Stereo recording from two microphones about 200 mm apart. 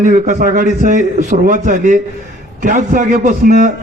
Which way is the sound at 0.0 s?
40° right (ahead or behind).